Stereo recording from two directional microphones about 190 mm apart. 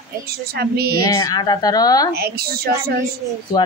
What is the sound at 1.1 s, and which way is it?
Speech, 20° left (ahead or behind).